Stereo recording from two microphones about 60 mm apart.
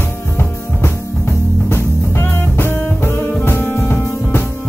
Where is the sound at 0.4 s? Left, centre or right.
Left.